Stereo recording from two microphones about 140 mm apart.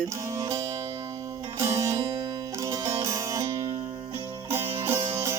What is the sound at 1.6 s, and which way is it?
Music, 20° right (ahead or behind).